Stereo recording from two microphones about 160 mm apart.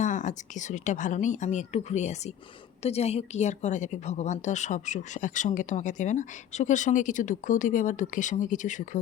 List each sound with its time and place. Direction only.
0.0 s a woman's voice: 50° left (ahead or behind)